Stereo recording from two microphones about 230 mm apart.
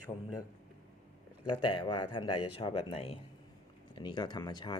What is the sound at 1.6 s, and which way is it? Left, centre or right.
Speech, centre.